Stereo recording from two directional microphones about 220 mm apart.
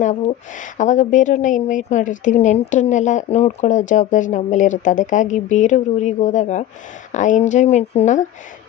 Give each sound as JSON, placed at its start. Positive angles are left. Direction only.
{"t": 0.0, "sound": "a woman's voice", "side_deg": 35}